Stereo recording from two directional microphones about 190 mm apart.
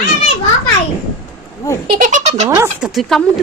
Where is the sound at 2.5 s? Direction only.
15° right (ahead or behind).